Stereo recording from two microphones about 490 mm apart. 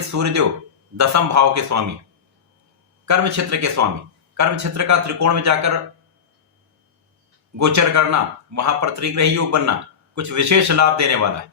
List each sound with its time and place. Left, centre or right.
0.1 s speech: right
3.1 s speech: right
7.6 s speech: right